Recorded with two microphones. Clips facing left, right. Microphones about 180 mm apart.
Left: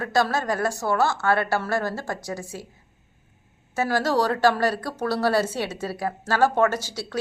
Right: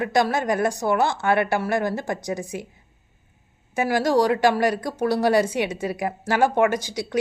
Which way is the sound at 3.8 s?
15° right (ahead or behind).